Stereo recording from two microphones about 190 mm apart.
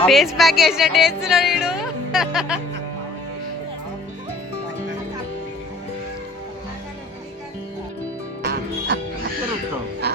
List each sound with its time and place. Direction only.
0.0 s speech: centre (ahead or behind)
8.4 s music: 65° right (ahead or behind)